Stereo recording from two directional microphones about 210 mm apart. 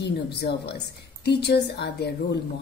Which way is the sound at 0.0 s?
50° left (ahead or behind).